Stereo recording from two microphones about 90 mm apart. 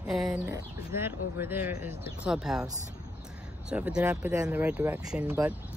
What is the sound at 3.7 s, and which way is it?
Speech, 10° right (ahead or behind).